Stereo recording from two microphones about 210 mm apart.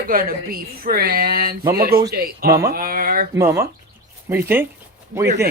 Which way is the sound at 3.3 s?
15° right (ahead or behind).